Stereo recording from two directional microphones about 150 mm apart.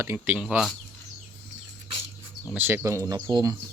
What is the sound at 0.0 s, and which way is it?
Speech, 10° right (ahead or behind).